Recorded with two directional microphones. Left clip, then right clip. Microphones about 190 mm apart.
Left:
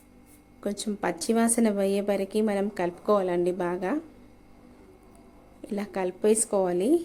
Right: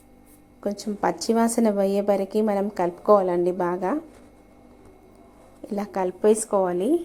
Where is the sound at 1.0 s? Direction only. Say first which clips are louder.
Right 4 dB; centre (ahead or behind).